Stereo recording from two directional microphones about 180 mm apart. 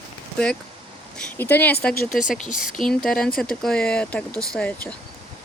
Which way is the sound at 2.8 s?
Centre (ahead or behind).